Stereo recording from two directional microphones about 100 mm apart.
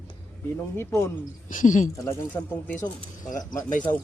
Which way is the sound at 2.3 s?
20° left (ahead or behind).